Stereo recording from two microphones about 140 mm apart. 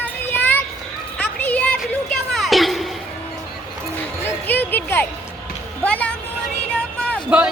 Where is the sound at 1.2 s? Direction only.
10° left (ahead or behind).